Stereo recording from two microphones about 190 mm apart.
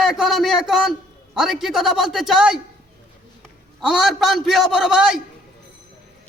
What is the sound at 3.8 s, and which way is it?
A man's voice, centre (ahead or behind).